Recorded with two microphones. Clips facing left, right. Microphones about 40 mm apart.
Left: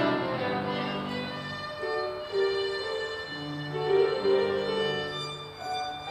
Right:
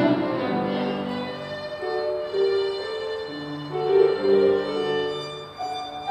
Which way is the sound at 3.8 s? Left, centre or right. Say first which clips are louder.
Right 6 dB; centre.